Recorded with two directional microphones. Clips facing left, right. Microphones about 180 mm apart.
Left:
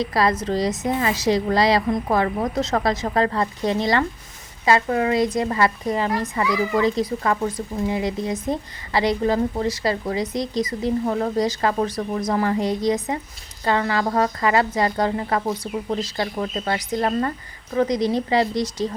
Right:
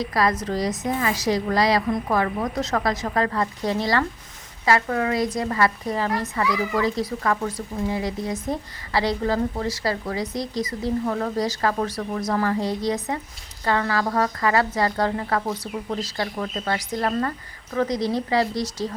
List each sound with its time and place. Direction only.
0.0 s a woman's voice: 25° left (ahead or behind)